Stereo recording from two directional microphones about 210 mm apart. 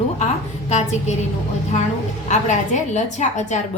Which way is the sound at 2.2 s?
35° left (ahead or behind).